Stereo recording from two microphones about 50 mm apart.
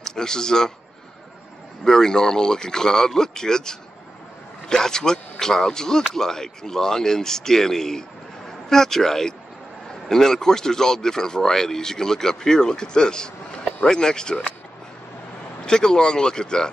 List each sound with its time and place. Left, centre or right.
0.0 s a man's voice: centre
1.9 s speech: centre
15.6 s speech: centre